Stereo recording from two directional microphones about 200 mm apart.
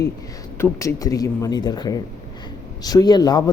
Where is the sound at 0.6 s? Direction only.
15° left (ahead or behind).